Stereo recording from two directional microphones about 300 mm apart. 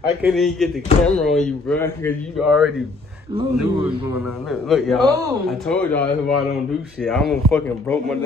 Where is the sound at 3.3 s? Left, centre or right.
Centre.